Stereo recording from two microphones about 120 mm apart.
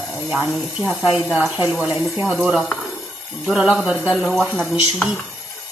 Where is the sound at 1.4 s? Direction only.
15° right (ahead or behind).